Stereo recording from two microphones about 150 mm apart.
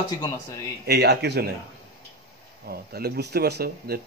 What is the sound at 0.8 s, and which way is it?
Speech, 90° right.